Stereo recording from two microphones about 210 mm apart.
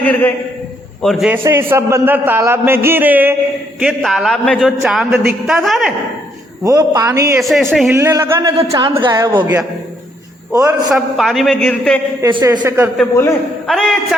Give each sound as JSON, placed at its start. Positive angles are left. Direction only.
{"t": 0.0, "sound": "a man's voice", "side_deg": 10}
{"t": 6.7, "sound": "a man's voice", "side_deg": -15}
{"t": 7.4, "sound": "a man's voice", "side_deg": 0}
{"t": 7.9, "sound": "a man's voice", "side_deg": -10}
{"t": 10.9, "sound": "a man's voice", "side_deg": 0}
{"t": 12.2, "sound": "a man's voice", "side_deg": -15}
{"t": 13.7, "sound": "a man's voice", "side_deg": 0}